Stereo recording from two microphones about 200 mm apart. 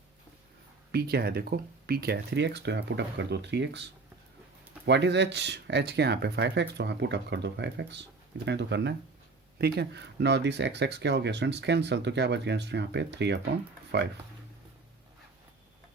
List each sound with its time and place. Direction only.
0.9 s speech: 55° right (ahead or behind)
4.9 s speech: 60° right (ahead or behind)